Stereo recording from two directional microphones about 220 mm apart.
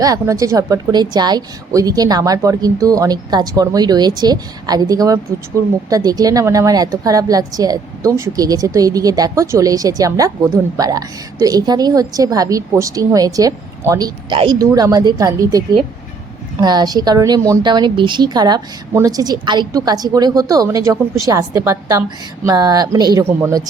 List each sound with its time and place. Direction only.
0.0 s a woman's voice: 15° right (ahead or behind)